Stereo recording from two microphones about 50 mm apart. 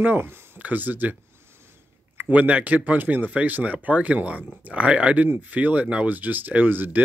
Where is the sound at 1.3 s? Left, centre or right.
Right.